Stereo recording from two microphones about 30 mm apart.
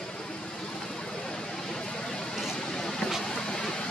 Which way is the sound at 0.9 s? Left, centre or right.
Left.